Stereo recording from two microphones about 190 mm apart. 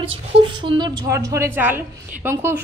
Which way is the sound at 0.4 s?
25° right (ahead or behind).